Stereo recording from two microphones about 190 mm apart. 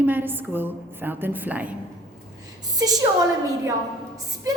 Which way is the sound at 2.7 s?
20° right (ahead or behind).